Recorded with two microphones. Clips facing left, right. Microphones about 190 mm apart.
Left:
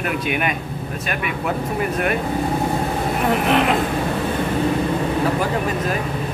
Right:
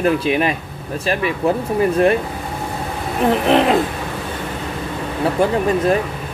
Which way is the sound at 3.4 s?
35° right (ahead or behind).